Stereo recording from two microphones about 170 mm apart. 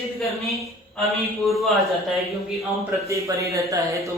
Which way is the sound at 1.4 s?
Centre (ahead or behind).